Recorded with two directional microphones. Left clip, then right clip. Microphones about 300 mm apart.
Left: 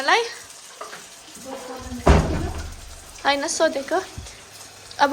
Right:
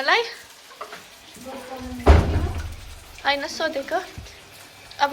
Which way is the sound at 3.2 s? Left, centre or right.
Centre.